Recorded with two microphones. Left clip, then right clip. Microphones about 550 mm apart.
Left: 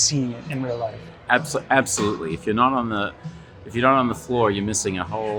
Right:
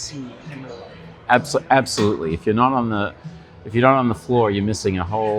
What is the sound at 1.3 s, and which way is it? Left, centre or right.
Speech, right.